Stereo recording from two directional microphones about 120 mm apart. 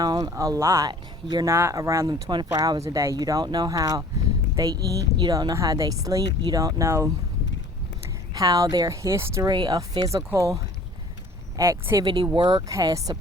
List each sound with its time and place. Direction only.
0.0 s speech: 35° right (ahead or behind)
0.9 s speech: 35° right (ahead or behind)
1.5 s speech: 20° right (ahead or behind)
8.3 s speech: 30° right (ahead or behind)
9.5 s speech: 35° right (ahead or behind)
10.2 s speech: 25° right (ahead or behind)
12.0 s speech: 40° right (ahead or behind)